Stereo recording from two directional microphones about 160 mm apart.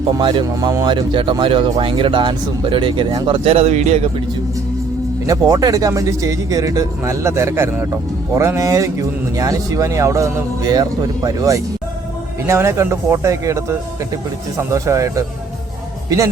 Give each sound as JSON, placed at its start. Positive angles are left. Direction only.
{"t": 0.1, "sound": "speech", "side_deg": -30}
{"t": 5.2, "sound": "a man's voice", "side_deg": -20}